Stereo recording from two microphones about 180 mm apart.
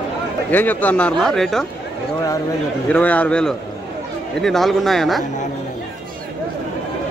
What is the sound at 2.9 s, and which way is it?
Speech, 10° left (ahead or behind).